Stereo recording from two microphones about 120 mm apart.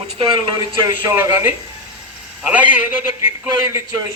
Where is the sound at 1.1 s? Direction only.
20° right (ahead or behind).